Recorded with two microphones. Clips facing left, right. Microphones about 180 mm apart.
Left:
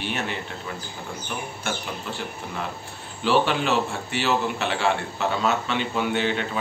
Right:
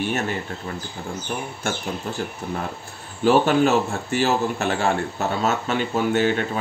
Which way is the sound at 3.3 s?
45° right (ahead or behind).